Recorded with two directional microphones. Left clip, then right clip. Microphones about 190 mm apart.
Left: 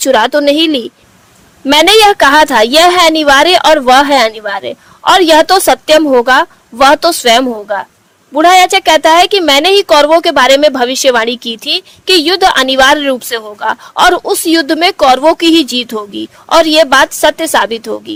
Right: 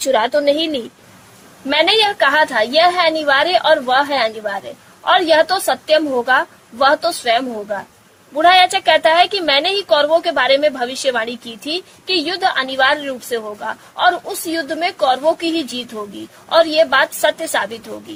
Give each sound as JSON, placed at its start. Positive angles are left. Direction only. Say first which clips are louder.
{"t": 0.0, "sound": "a woman's voice", "louder": "left 6 dB", "side_deg": 30}